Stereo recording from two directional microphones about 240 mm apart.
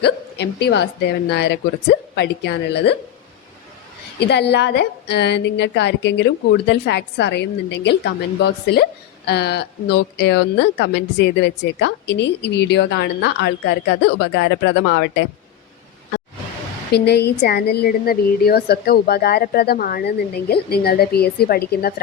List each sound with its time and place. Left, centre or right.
0.0 s a woman's voice: left
4.2 s a woman's voice: left
16.9 s a woman's voice: left